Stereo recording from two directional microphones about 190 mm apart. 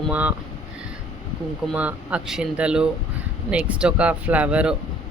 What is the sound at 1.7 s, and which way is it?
Speech, 5° right (ahead or behind).